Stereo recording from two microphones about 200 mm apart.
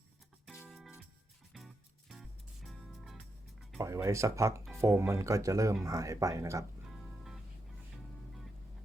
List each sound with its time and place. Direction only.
1.5 s music: centre (ahead or behind)
3.8 s speech: 15° right (ahead or behind)